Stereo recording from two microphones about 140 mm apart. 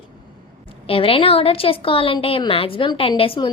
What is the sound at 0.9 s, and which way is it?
A woman's voice, 40° left (ahead or behind).